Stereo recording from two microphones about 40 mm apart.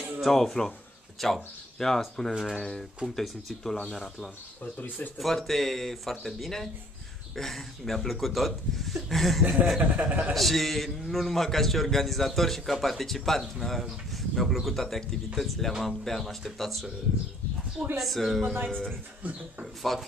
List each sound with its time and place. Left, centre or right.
0.2 s speech: centre
2.3 s speech: centre
3.2 s speech: centre
4.7 s speech: left
5.2 s a man's voice: centre
9.4 s speech: right
9.9 s a man's voice: right
10.3 s a man's voice: centre
17.9 s a man's voice: centre
18.4 s speech: right
18.7 s speech: centre
19.6 s a man's voice: centre